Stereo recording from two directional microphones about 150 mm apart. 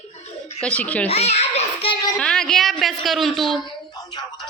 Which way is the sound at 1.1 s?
45° left (ahead or behind).